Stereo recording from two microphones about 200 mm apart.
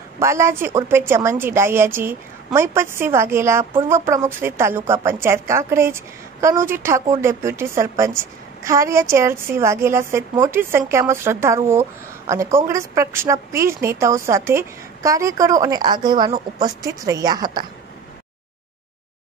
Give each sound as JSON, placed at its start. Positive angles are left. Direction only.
{"t": 0.2, "sound": "a woman's voice", "side_deg": -15}